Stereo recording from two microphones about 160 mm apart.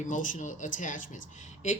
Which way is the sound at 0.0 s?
50° left (ahead or behind).